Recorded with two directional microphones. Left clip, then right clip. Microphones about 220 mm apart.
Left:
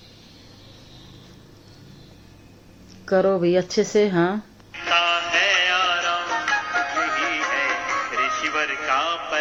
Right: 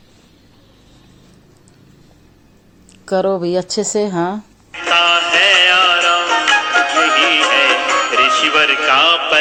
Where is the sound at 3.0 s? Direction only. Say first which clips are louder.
Right 3 dB; 20° right (ahead or behind).